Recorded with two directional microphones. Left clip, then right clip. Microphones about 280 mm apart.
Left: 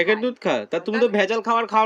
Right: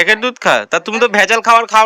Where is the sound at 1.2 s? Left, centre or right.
Right.